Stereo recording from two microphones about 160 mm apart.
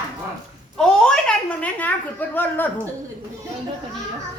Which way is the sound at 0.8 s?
5° left (ahead or behind).